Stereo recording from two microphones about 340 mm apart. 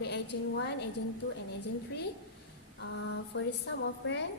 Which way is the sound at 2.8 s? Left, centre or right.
Left.